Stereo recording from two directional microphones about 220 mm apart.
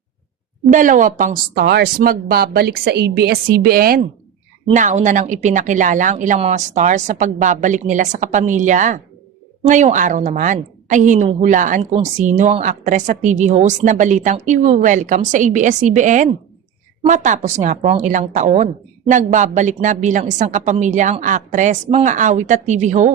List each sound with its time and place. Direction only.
0.7 s a woman's voice: 35° right (ahead or behind)